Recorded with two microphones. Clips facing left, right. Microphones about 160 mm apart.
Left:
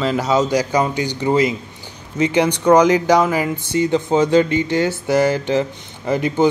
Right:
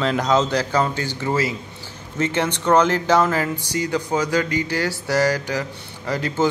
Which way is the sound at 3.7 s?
25° left (ahead or behind).